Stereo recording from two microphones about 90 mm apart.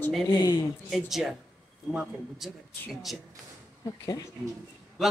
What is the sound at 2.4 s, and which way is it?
Speech, centre (ahead or behind).